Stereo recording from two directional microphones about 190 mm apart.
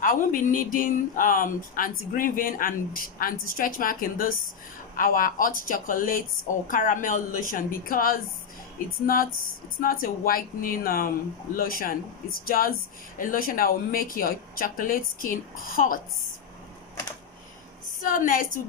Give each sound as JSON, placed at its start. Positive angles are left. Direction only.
{"t": 0.0, "sound": "speech", "side_deg": 45}
{"t": 18.0, "sound": "speech", "side_deg": 45}